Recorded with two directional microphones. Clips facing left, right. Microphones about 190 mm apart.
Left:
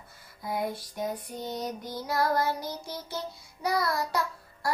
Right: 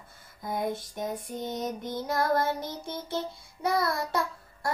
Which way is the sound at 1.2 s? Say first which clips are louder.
Right 2 dB; 25° right (ahead or behind).